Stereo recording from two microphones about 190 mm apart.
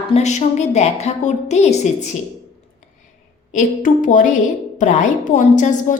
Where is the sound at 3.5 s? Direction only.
45° left (ahead or behind).